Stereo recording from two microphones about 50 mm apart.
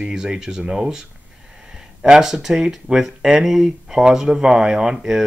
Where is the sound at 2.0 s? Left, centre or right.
Centre.